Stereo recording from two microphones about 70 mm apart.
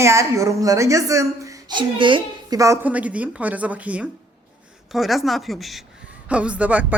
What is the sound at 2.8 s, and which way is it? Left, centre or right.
A woman's voice, centre.